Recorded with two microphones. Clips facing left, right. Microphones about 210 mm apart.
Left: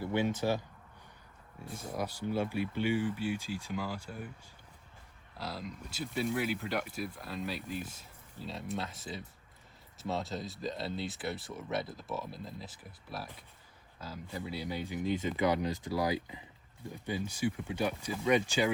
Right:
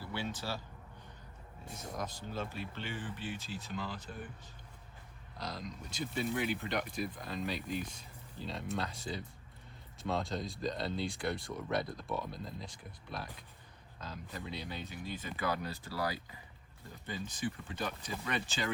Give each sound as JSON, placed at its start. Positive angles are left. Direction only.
{"t": 0.0, "sound": "a sound", "side_deg": 20}
{"t": 0.3, "sound": "speech", "side_deg": 20}
{"t": 2.0, "sound": "speech", "side_deg": 10}
{"t": 5.4, "sound": "speech", "side_deg": 5}